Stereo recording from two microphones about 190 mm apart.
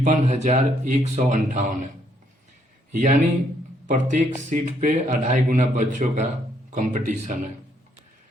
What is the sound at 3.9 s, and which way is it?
Speech, 40° right (ahead or behind).